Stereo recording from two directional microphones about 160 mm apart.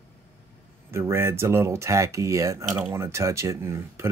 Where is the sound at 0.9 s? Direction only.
15° right (ahead or behind).